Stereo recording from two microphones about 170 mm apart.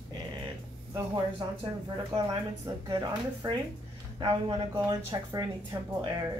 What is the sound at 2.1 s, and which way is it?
Speech, 20° right (ahead or behind).